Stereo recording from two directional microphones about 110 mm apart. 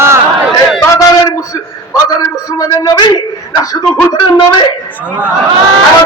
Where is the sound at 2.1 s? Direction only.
35° left (ahead or behind).